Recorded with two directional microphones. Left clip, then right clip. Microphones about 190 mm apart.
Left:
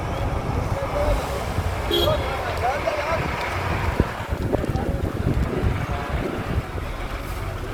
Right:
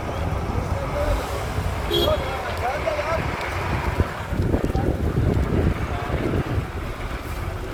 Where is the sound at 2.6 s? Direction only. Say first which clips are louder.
Left 1 dB; 55° left (ahead or behind).